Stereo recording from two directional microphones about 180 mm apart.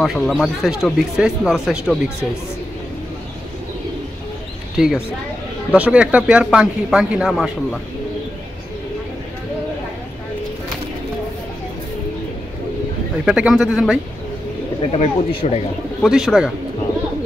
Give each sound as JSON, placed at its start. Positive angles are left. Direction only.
{"t": 0.0, "sound": "speech", "side_deg": 0}
{"t": 4.7, "sound": "speech", "side_deg": -5}
{"t": 13.2, "sound": "speech", "side_deg": -5}
{"t": 14.9, "sound": "speech", "side_deg": 35}
{"t": 16.0, "sound": "speech", "side_deg": 0}